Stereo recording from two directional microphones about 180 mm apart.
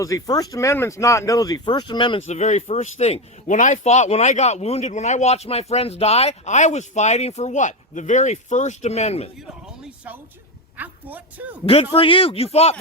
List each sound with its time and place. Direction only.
0.0 s speech: 20° left (ahead or behind)
2.2 s speech: 40° left (ahead or behind)
9.5 s a sound: 5° right (ahead or behind)
10.8 s speech: 10° right (ahead or behind)
11.6 s speech: 30° left (ahead or behind)